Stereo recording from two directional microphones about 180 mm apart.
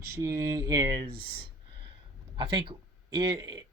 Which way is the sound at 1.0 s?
55° right (ahead or behind).